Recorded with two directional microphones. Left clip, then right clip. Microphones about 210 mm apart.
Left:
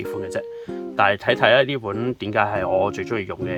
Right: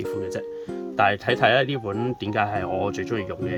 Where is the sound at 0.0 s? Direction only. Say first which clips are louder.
Left 1 dB; 15° left (ahead or behind).